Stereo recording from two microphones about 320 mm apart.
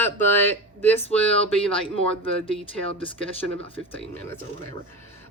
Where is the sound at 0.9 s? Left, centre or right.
Centre.